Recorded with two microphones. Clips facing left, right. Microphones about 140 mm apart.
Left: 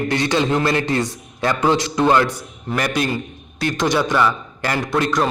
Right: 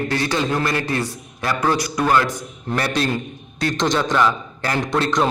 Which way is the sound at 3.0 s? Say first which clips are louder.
Even; 5° left (ahead or behind).